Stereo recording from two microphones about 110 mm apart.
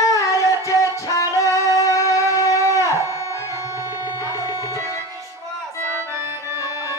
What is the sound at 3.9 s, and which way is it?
Music, 30° left (ahead or behind).